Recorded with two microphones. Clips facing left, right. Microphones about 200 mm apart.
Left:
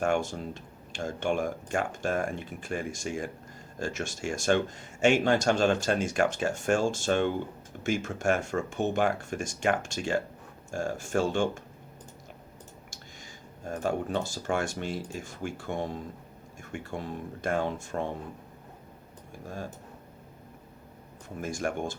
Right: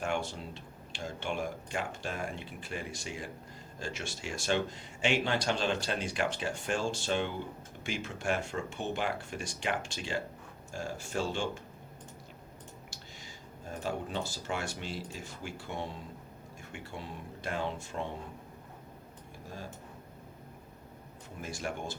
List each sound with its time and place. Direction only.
0.0 s speech: 45° left (ahead or behind)
13.7 s speech: 50° left (ahead or behind)
21.4 s speech: 50° left (ahead or behind)